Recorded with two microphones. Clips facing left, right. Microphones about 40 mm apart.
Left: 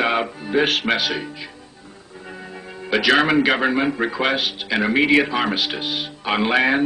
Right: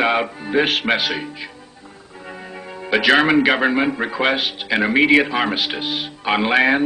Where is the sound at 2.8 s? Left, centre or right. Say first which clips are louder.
Right 2 dB; centre.